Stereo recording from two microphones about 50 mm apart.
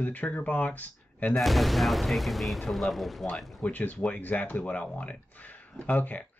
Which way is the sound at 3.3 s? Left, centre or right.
Left.